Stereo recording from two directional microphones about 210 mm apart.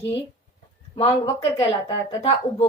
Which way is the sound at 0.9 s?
25° left (ahead or behind).